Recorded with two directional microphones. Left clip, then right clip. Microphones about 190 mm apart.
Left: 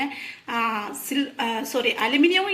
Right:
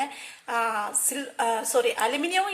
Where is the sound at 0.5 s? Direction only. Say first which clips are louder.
Left 1 dB; 50° right (ahead or behind).